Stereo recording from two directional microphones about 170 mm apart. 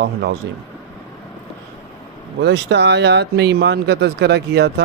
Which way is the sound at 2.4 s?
90° right.